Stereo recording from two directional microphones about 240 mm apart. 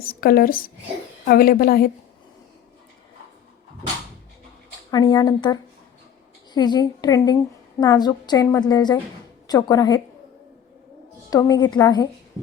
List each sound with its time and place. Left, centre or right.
0.0 s a woman's voice: left
4.9 s a woman's voice: centre
11.3 s a woman's voice: centre